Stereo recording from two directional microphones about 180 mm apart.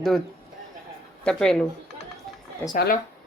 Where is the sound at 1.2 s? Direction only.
5° left (ahead or behind).